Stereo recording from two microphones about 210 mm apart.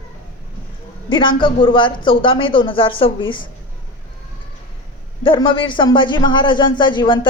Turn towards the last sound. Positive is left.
turn(degrees=20)  # may be behind; listen again after turning